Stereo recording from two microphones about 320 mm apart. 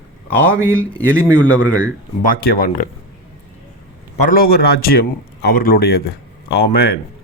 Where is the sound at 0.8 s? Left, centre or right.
Centre.